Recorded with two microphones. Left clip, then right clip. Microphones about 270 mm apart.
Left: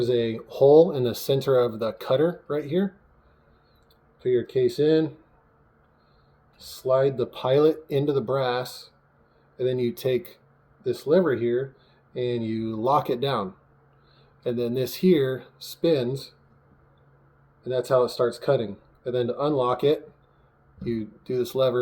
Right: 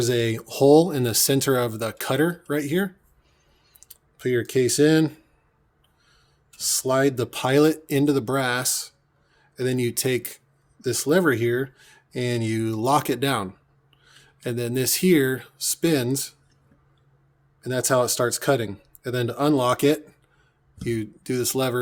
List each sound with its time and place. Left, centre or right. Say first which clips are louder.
0.0 s speech: right 1 dB; right
6.7 s speech: even; right
14.4 s speech: even; right
17.6 s speech: even; right